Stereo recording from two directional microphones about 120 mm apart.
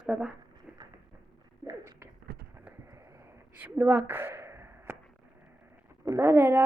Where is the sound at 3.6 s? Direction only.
10° right (ahead or behind).